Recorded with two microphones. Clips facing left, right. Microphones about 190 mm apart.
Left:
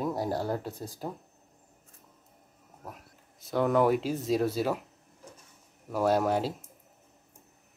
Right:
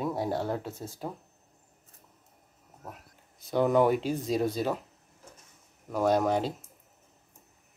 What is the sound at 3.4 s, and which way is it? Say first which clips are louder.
Speech: right 1 dB; centre (ahead or behind).